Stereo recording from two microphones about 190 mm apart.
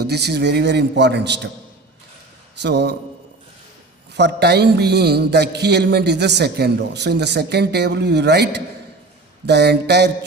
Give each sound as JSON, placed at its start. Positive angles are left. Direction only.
{"t": 0.1, "sound": "speech", "side_deg": -60}
{"t": 2.6, "sound": "speech", "side_deg": -60}
{"t": 4.1, "sound": "speech", "side_deg": -60}